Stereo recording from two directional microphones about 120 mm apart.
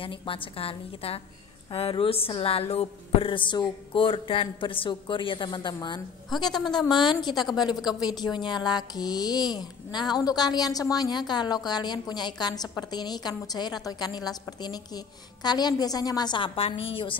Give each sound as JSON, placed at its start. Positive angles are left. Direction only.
{"t": 0.0, "sound": "speech", "side_deg": 45}
{"t": 6.5, "sound": "a woman's voice", "side_deg": 5}
{"t": 6.9, "sound": "a woman's voice", "side_deg": 40}